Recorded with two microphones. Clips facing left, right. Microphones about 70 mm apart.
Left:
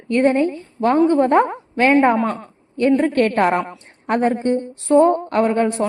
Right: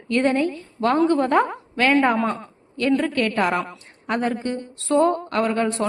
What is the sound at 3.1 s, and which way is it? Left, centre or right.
A woman's voice, left.